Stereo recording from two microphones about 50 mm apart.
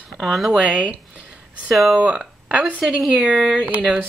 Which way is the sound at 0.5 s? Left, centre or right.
Right.